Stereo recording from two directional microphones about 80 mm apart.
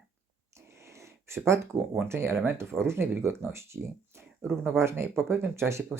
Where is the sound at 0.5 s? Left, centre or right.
Right.